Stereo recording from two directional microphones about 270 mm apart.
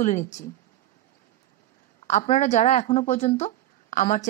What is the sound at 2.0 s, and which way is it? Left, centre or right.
A woman's voice, left.